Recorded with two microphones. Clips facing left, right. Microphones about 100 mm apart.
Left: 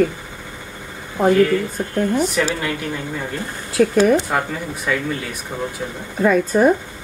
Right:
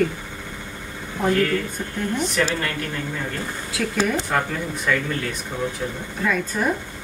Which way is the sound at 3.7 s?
55° left (ahead or behind).